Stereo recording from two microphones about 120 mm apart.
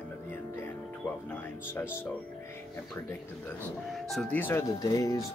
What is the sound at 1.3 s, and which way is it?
Speech, 20° left (ahead or behind).